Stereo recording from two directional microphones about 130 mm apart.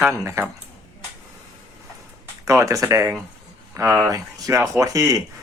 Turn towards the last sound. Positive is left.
turn(degrees=-25)  # may be behind; listen again after turning